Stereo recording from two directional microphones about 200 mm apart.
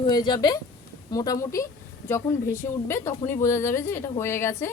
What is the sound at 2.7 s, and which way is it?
A woman's voice, 15° left (ahead or behind).